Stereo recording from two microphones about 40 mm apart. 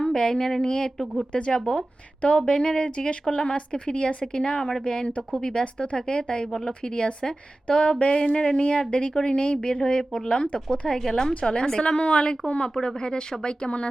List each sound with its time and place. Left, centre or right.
0.0 s speech: centre